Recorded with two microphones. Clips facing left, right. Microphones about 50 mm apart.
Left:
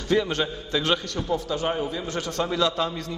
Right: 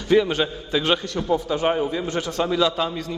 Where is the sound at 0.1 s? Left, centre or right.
Centre.